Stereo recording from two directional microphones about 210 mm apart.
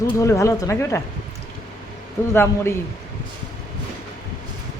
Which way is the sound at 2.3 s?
10° left (ahead or behind).